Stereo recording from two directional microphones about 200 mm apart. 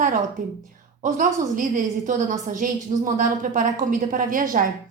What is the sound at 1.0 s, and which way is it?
A woman's voice, 40° right (ahead or behind).